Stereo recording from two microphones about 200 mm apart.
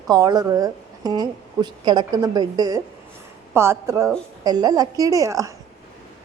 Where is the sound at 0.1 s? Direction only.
20° right (ahead or behind).